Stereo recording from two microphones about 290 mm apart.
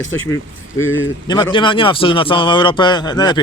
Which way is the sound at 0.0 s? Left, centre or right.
Left.